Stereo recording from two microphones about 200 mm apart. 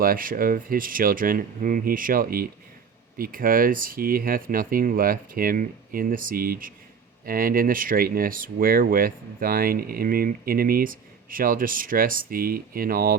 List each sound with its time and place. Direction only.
0.0 s speech: 45° right (ahead or behind)